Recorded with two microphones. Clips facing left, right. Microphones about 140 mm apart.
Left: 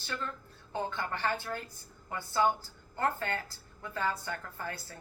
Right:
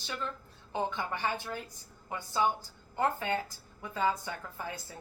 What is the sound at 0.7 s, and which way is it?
A woman's voice, 15° right (ahead or behind).